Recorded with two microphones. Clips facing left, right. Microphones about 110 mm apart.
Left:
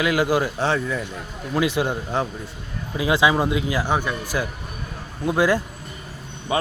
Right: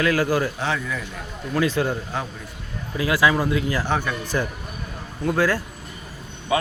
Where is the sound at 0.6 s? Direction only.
30° left (ahead or behind).